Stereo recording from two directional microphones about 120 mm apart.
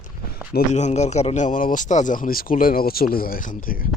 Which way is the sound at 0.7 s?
75° left (ahead or behind).